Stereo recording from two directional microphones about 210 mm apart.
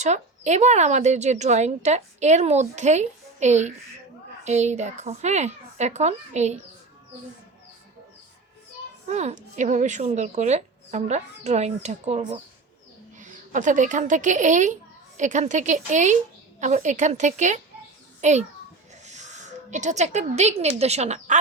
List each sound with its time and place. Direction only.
0.0 s a woman's voice: 35° right (ahead or behind)
9.0 s a woman's voice: 30° right (ahead or behind)